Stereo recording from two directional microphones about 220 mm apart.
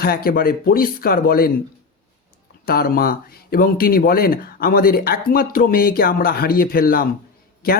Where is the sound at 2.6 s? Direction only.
45° left (ahead or behind).